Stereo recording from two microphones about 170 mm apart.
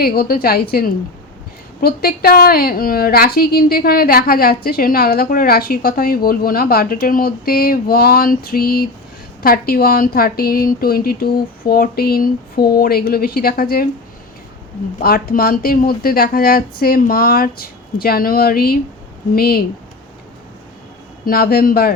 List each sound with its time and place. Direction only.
0.0 s a woman's voice: 65° left (ahead or behind)
14.9 s a woman's voice: 60° left (ahead or behind)
21.2 s a woman's voice: 60° left (ahead or behind)